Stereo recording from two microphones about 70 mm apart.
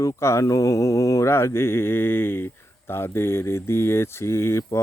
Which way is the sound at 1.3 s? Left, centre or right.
Left.